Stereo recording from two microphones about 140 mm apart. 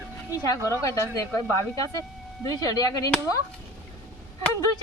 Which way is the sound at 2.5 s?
25° left (ahead or behind).